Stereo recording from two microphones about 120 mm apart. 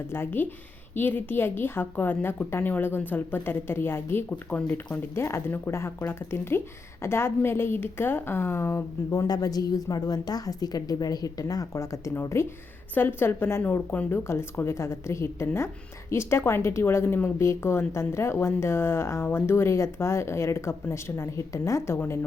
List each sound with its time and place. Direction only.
0.1 s a woman's voice: 20° left (ahead or behind)